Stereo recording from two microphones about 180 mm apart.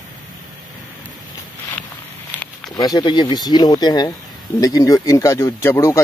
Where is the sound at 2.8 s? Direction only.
25° left (ahead or behind).